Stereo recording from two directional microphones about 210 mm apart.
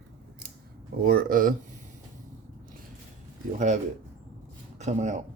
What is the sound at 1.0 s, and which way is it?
Speech, 45° right (ahead or behind).